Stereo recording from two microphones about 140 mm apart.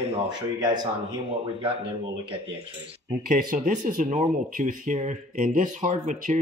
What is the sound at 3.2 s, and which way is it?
Speech, 80° right.